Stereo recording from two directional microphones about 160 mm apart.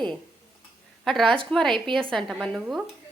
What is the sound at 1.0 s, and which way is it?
Speech, centre (ahead or behind).